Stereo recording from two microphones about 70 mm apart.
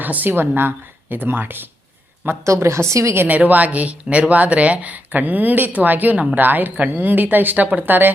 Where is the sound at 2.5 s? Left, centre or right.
Right.